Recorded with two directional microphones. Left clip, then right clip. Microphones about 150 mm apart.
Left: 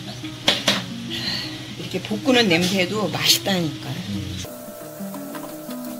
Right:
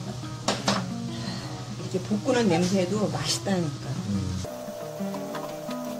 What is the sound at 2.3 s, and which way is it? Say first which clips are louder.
Speech: left 6 dB; 20° left (ahead or behind).